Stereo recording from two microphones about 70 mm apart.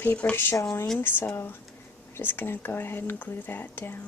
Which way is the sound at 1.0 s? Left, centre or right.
Left.